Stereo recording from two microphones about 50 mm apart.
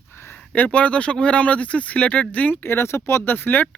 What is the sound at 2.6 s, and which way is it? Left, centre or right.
Speech, left.